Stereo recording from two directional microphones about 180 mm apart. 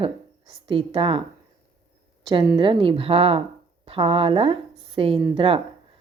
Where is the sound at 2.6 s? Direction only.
30° right (ahead or behind).